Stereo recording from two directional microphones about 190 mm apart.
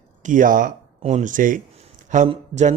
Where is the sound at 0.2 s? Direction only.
45° right (ahead or behind).